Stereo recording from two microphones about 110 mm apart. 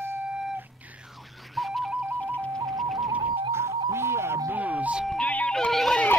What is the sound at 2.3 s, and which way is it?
Music, 10° left (ahead or behind).